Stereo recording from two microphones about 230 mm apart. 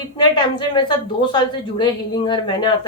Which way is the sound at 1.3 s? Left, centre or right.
Centre.